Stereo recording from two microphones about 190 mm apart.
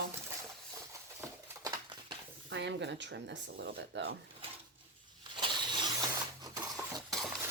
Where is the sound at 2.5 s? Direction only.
70° right (ahead or behind).